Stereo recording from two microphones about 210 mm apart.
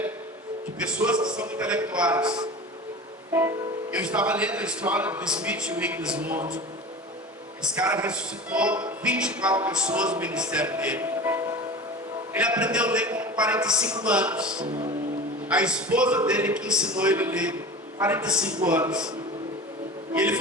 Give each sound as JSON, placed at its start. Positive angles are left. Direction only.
{"t": 0.8, "sound": "speech", "side_deg": -5}
{"t": 2.1, "sound": "a man's voice", "side_deg": -20}
{"t": 3.9, "sound": "speech", "side_deg": -5}
{"t": 7.7, "sound": "speech", "side_deg": -5}
{"t": 20.1, "sound": "speech", "side_deg": -5}